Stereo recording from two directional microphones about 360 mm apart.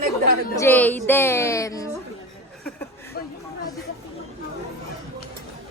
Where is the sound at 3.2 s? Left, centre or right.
Left.